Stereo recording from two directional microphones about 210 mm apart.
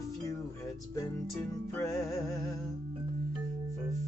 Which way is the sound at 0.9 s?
15° left (ahead or behind).